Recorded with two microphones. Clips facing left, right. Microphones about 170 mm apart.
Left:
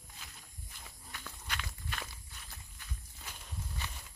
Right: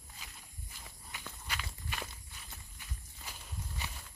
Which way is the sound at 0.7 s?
10° right (ahead or behind).